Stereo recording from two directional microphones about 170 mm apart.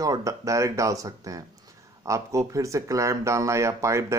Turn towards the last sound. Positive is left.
turn(degrees=-15)  # may be behind; listen again after turning